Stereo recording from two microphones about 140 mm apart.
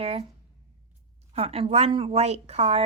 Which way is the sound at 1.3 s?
45° right (ahead or behind).